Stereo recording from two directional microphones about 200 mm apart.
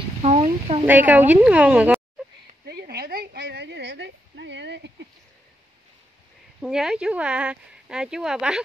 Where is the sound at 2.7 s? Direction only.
55° right (ahead or behind).